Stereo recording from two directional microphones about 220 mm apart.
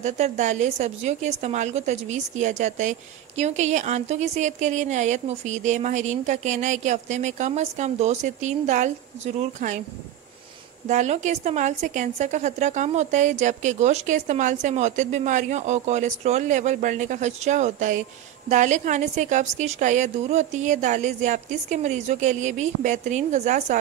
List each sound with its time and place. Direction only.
0.0 s speech: 30° right (ahead or behind)
10.9 s speech: 30° right (ahead or behind)